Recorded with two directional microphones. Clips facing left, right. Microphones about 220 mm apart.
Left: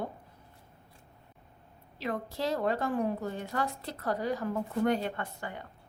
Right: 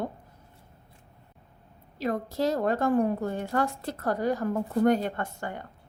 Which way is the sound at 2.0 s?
40° right (ahead or behind).